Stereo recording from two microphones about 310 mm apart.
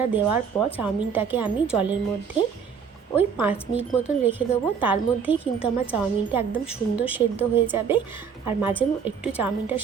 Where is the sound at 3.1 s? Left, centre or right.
Centre.